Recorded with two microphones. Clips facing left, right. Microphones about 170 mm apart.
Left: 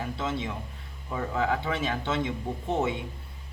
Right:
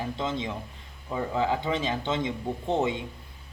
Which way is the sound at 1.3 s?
25° right (ahead or behind).